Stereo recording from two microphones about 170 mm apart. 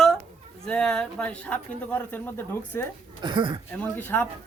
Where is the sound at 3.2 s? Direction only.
25° right (ahead or behind).